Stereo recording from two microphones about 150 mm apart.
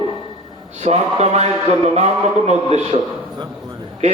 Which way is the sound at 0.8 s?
45° right (ahead or behind).